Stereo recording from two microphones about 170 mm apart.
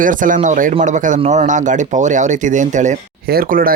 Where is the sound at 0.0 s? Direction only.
50° right (ahead or behind).